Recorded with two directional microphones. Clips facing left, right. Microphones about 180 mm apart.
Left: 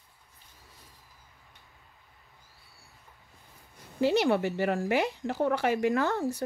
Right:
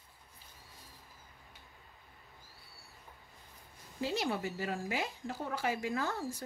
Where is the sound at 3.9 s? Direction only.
70° left (ahead or behind).